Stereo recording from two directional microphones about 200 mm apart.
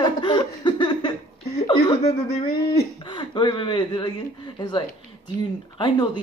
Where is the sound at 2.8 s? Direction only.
25° left (ahead or behind).